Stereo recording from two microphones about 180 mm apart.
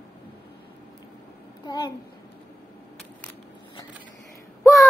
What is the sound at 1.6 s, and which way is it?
Speech, 25° left (ahead or behind).